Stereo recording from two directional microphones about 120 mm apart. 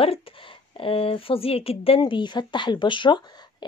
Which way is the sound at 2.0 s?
40° left (ahead or behind).